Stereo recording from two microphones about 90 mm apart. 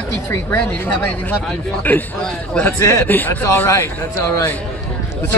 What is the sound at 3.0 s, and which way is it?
A man's voice, 20° left (ahead or behind).